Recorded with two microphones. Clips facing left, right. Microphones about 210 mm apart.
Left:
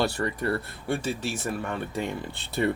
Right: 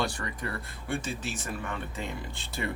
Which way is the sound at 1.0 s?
65° left (ahead or behind).